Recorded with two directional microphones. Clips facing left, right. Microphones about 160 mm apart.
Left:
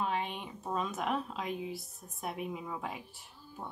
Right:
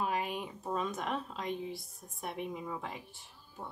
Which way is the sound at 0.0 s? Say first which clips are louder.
Even; 5° right (ahead or behind).